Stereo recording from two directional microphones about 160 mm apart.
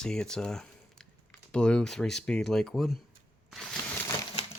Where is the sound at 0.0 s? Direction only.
5° left (ahead or behind).